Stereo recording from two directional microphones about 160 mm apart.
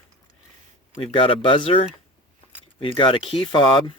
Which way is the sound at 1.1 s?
35° left (ahead or behind).